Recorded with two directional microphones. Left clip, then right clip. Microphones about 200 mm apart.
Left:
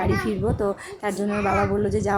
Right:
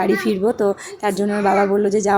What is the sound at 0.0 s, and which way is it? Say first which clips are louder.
A woman's voice: right 6 dB; 20° right (ahead or behind).